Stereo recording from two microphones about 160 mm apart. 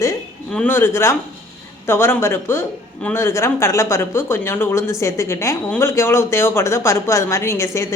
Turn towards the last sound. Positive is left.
turn(degrees=15)  # may be behind; listen again after turning